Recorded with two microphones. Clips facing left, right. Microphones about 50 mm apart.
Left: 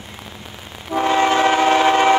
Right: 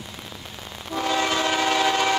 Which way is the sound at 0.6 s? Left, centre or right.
Left.